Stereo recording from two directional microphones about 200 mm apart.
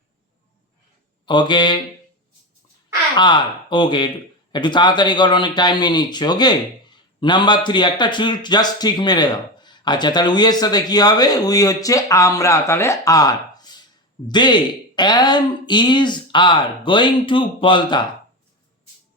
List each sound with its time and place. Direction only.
1.2 s speech: 25° left (ahead or behind)
3.2 s speech: 25° left (ahead or behind)